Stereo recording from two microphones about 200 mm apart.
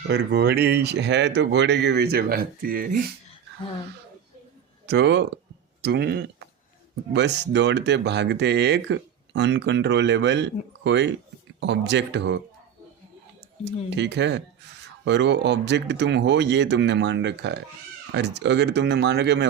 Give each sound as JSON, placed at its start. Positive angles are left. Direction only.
{"t": 0.1, "sound": "speech", "side_deg": -55}
{"t": 4.9, "sound": "speech", "side_deg": -60}
{"t": 13.9, "sound": "speech", "side_deg": -60}